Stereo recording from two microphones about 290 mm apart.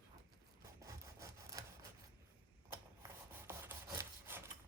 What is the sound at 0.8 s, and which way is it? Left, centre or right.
Wood, centre.